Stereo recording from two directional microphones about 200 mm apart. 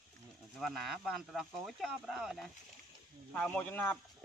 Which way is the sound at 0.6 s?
Centre (ahead or behind).